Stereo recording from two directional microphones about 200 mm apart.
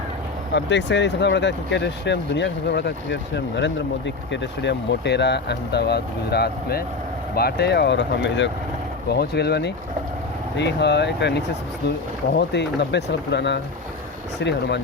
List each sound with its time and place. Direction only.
0.5 s speech: 60° left (ahead or behind)